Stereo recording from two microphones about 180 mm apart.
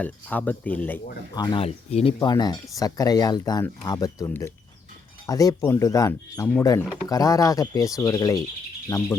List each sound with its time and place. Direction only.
0.0 s speech: 10° left (ahead or behind)
1.4 s speech: 20° left (ahead or behind)
1.6 s speech: 35° left (ahead or behind)
2.1 s speech: 20° left (ahead or behind)